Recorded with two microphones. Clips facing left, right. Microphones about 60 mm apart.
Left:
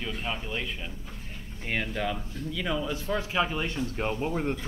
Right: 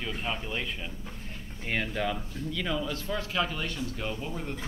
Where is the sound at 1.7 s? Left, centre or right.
Centre; by 4.5 s left.